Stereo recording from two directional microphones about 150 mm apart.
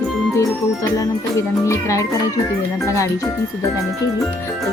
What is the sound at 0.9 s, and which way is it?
Music, 20° left (ahead or behind).